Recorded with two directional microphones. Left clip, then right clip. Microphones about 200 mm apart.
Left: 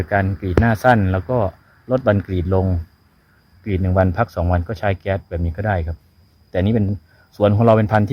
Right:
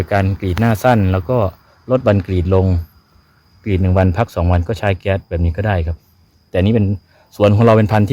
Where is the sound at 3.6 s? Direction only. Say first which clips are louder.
Right 2 dB; 55° right (ahead or behind).